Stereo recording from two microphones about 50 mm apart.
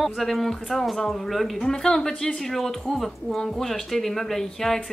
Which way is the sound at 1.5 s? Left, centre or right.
Centre.